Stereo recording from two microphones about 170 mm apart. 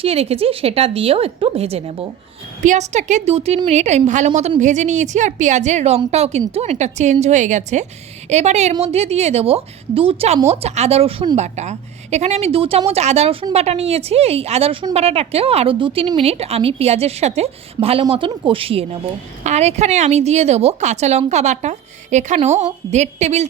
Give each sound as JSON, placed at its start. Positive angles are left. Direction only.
{"t": 0.0, "sound": "a woman's voice", "side_deg": -35}